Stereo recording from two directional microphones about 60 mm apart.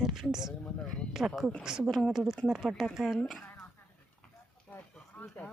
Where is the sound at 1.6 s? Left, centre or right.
Centre.